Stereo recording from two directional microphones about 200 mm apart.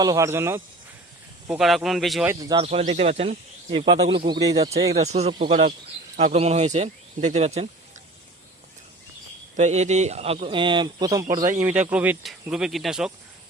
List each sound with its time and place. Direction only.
0.0 s speech: 15° right (ahead or behind)
1.5 s speech: centre (ahead or behind)
2.2 s speech: 15° right (ahead or behind)
2.6 s speech: 35° right (ahead or behind)
4.6 s speech: 30° right (ahead or behind)
9.6 s a man's voice: 35° right (ahead or behind); by 11.4 s 20° right (ahead or behind)
11.6 s speech: 5° right (ahead or behind)